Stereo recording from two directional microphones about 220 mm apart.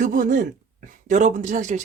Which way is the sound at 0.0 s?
35° right (ahead or behind).